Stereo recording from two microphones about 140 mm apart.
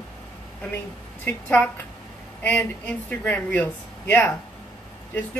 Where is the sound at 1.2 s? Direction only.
15° left (ahead or behind).